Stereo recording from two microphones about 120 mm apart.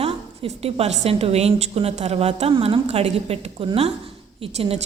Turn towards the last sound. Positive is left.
turn(degrees=-55)  # may be behind; listen again after turning